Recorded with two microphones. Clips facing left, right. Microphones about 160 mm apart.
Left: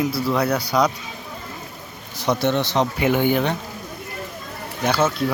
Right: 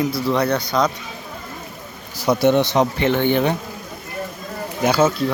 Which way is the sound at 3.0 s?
10° left (ahead or behind).